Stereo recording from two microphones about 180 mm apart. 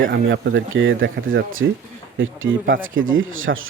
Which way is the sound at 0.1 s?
85° right.